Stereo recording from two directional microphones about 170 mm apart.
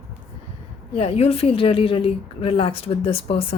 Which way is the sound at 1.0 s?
35° left (ahead or behind).